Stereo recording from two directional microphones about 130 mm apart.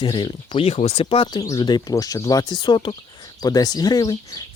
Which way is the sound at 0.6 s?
55° left (ahead or behind).